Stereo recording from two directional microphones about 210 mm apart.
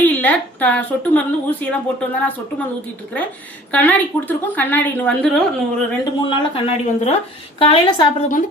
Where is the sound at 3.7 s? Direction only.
10° left (ahead or behind).